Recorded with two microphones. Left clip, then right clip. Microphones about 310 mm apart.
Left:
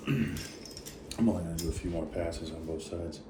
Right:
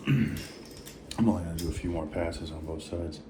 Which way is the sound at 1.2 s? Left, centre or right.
Right.